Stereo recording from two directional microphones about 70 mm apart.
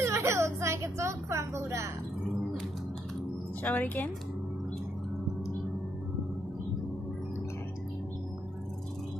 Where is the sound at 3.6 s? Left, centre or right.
Left.